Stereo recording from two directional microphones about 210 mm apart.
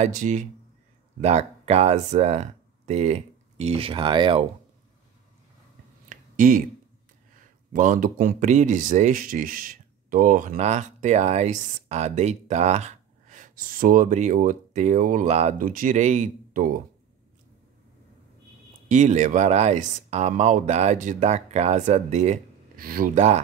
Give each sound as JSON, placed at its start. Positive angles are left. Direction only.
{"t": 0.0, "sound": "speech", "side_deg": -35}
{"t": 6.0, "sound": "a sound", "side_deg": -40}
{"t": 7.3, "sound": "speech", "side_deg": -40}
{"t": 18.9, "sound": "speech", "side_deg": -35}